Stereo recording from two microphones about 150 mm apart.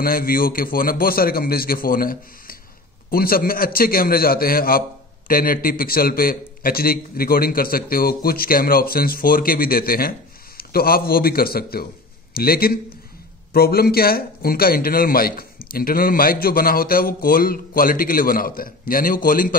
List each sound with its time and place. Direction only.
0.0 s a man's voice: 75° left (ahead or behind)